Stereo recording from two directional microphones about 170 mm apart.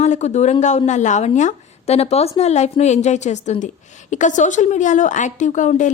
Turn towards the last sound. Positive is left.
turn(degrees=45)  # may be behind; listen again after turning